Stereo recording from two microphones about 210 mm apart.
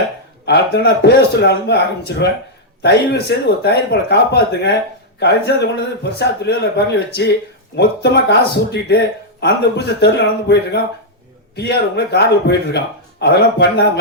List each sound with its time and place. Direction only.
0.4 s speech: 50° left (ahead or behind)